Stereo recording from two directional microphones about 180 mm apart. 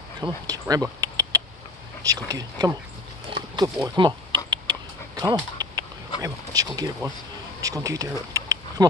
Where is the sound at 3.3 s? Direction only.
25° right (ahead or behind).